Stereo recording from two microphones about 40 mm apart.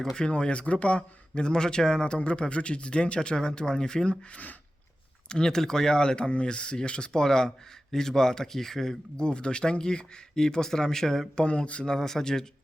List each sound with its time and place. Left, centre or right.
0.0 s speech: centre
0.3 s speech: left
4.3 s speech: left
5.3 s speech: centre
9.1 s speech: left
11.3 s speech: left
11.9 s speech: centre